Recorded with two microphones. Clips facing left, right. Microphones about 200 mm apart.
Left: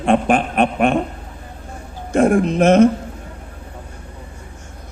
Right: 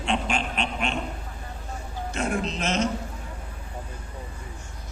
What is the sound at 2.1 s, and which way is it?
Speech, 55° left (ahead or behind).